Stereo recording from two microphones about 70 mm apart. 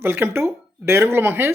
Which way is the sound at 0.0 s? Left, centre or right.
Right.